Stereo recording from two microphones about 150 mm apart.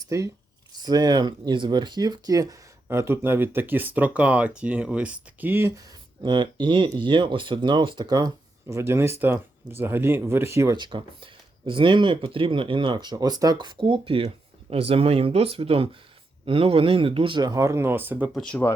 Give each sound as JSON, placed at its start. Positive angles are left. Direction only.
{"t": 0.9, "sound": "speech", "side_deg": -30}
{"t": 6.2, "sound": "speech", "side_deg": -30}
{"t": 10.8, "sound": "speech", "side_deg": -35}
{"t": 18.3, "sound": "speech", "side_deg": 5}